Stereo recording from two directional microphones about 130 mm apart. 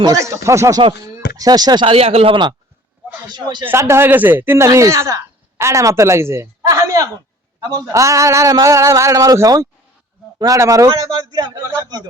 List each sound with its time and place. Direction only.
0.0 s a man's voice: 25° right (ahead or behind)
1.1 s a sound: 30° right (ahead or behind)
1.9 s a man's voice: 50° right (ahead or behind)
3.7 s a man's voice: 20° right (ahead or behind)